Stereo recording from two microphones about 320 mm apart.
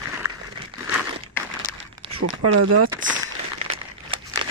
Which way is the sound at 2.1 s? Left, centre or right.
Right.